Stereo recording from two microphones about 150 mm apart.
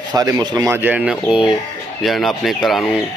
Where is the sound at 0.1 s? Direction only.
25° right (ahead or behind).